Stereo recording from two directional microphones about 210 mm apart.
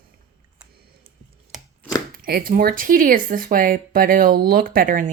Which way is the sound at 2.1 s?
45° right (ahead or behind).